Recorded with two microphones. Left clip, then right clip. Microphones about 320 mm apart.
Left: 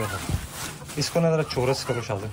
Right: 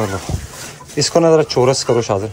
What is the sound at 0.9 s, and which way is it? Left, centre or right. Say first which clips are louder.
Speech: right 12 dB; right.